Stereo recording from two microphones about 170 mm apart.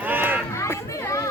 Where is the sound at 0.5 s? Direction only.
15° left (ahead or behind).